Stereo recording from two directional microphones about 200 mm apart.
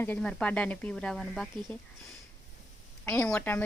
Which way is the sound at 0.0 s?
5° left (ahead or behind).